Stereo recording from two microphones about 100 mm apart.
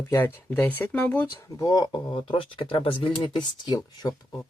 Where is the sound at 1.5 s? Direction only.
40° left (ahead or behind).